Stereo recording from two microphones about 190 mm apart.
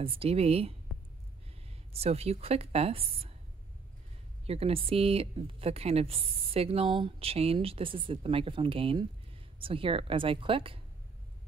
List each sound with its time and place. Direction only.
0.0 s a woman's voice: 30° right (ahead or behind)
1.9 s a woman's voice: 30° right (ahead or behind)
4.5 s a woman's voice: 30° right (ahead or behind)